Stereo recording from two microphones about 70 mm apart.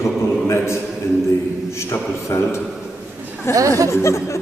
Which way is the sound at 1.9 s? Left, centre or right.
Left.